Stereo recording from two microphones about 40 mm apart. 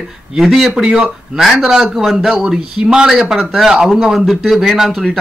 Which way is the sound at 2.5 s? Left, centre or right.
Centre.